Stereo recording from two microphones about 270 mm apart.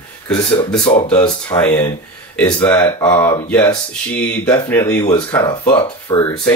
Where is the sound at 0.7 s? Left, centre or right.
Centre.